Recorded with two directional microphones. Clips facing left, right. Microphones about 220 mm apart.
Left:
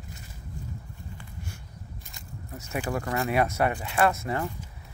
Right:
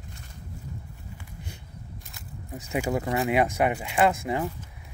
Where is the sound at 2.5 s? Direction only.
15° right (ahead or behind).